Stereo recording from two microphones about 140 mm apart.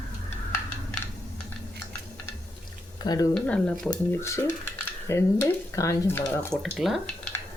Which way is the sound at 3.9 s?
20° left (ahead or behind).